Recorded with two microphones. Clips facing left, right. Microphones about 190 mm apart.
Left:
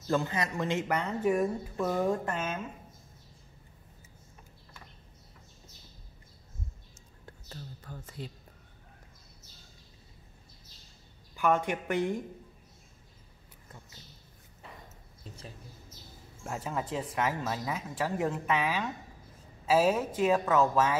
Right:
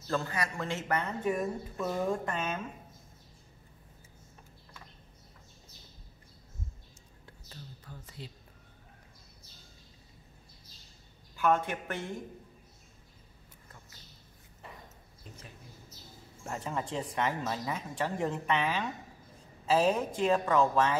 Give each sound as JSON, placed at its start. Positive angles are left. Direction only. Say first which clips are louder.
{"t": 0.1, "sound": "a woman's voice", "louder": "left 3 dB", "side_deg": 20}
{"t": 7.4, "sound": "a sound", "louder": "left 4 dB", "side_deg": 50}
{"t": 11.3, "sound": "a woman's voice", "louder": "left 1 dB", "side_deg": 15}
{"t": 16.4, "sound": "speech", "louder": "left 1 dB", "side_deg": 5}